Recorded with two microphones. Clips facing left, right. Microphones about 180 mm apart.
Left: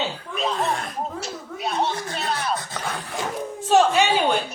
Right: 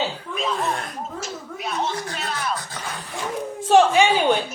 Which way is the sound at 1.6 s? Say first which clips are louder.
Left 2 dB; 35° left (ahead or behind).